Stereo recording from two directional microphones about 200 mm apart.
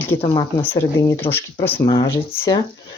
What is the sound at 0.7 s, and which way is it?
Speech, 15° left (ahead or behind).